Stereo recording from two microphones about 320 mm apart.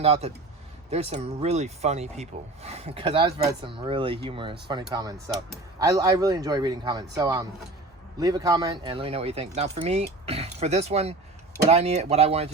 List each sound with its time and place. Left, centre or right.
0.0 s speech: centre